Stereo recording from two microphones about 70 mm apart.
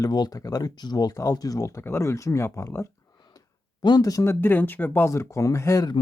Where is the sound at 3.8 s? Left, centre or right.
Left.